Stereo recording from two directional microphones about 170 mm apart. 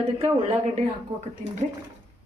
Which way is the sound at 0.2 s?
40° right (ahead or behind).